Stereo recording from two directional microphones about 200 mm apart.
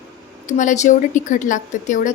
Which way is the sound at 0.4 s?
40° left (ahead or behind).